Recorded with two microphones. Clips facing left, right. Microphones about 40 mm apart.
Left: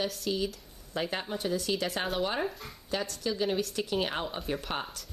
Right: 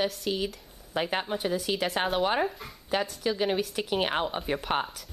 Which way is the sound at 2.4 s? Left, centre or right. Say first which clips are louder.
Right 3 dB; centre.